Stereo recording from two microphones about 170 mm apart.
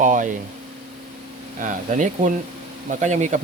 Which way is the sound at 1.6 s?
50° right (ahead or behind).